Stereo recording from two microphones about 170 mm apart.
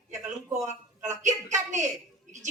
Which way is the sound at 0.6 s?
45° right (ahead or behind).